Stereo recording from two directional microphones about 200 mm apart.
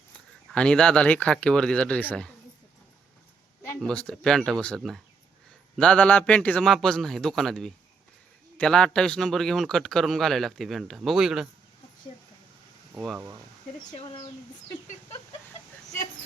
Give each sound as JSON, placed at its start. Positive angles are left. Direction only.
{"t": 0.5, "sound": "speech", "side_deg": 5}
{"t": 3.8, "sound": "speech", "side_deg": 5}
{"t": 13.9, "sound": "speech", "side_deg": 30}